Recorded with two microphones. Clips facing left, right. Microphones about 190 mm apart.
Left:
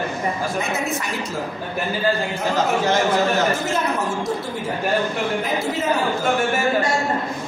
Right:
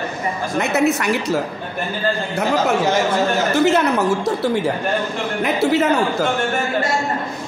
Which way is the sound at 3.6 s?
70° right (ahead or behind).